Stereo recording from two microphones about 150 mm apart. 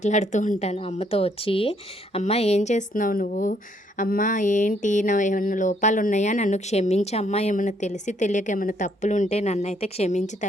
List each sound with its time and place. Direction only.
0.0 s a woman's voice: 50° left (ahead or behind)